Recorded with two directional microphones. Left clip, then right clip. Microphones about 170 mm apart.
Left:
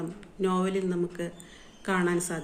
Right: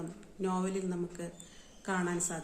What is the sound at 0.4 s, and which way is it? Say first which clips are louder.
A woman's voice: left 7 dB; 15° right (ahead or behind).